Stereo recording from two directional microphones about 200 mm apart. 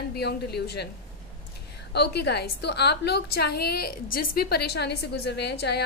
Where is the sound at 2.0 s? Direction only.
55° left (ahead or behind).